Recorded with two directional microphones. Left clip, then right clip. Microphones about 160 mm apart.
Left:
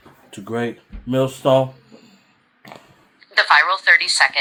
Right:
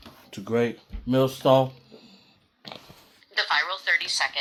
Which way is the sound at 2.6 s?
50° right (ahead or behind).